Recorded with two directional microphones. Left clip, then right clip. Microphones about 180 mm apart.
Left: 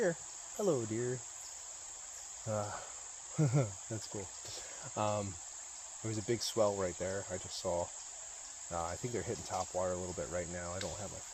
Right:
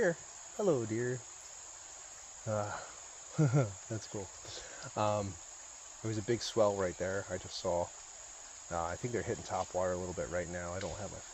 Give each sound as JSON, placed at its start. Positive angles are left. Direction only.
{"t": 0.0, "sound": "cricket", "side_deg": -30}
{"t": 2.5, "sound": "cricket", "side_deg": -35}
{"t": 4.5, "sound": "speech", "side_deg": -35}
{"t": 6.0, "sound": "cricket", "side_deg": -35}